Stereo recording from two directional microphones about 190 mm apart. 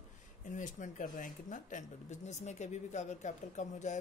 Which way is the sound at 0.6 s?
40° left (ahead or behind).